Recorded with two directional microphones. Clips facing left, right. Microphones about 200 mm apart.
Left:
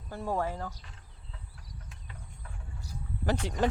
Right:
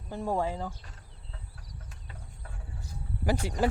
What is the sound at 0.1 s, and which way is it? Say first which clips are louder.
Speech: right 2 dB; 15° right (ahead or behind).